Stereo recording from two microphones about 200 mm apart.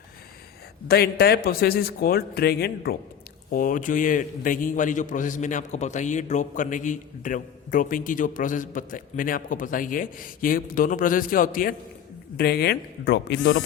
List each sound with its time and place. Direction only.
0.9 s a man's voice: 50° left (ahead or behind)